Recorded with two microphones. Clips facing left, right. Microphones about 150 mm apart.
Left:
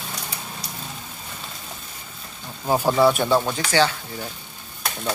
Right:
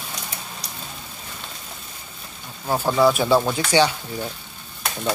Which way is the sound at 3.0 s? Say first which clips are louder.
Right 3 dB; centre (ahead or behind).